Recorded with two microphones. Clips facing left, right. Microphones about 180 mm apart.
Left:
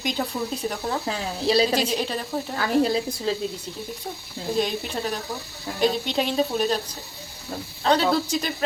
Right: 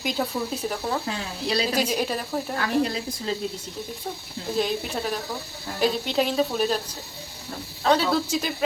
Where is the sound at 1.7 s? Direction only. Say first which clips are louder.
Even; 10° right (ahead or behind).